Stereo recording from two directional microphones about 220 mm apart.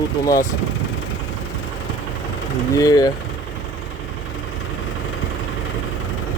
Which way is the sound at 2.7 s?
15° left (ahead or behind).